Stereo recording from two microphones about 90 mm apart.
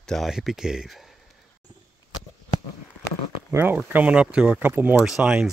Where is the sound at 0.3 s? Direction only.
5° right (ahead or behind).